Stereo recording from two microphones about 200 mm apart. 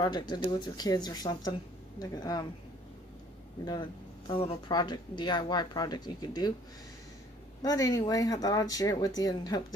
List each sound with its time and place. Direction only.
0.0 s speech: 20° left (ahead or behind)
4.3 s speech: 25° left (ahead or behind)
7.6 s speech: 20° left (ahead or behind)